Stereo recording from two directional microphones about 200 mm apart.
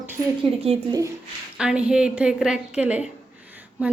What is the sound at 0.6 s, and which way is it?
Speech, 20° right (ahead or behind).